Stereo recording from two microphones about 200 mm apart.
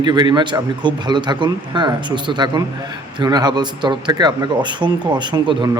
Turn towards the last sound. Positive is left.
turn(degrees=-20)  # may be behind; listen again after turning